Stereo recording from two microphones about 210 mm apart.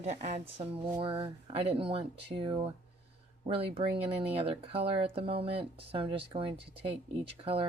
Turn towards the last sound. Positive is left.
turn(degrees=-25)  # may be behind; listen again after turning